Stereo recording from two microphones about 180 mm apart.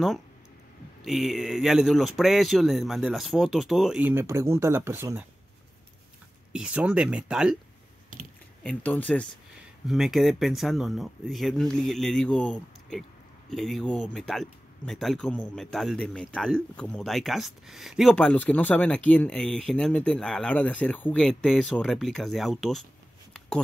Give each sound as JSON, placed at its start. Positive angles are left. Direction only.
{"t": 1.0, "sound": "speech", "side_deg": 0}
{"t": 6.5, "sound": "speech", "side_deg": -5}
{"t": 8.1, "sound": "a sound", "side_deg": -50}
{"t": 8.6, "sound": "speech", "side_deg": 5}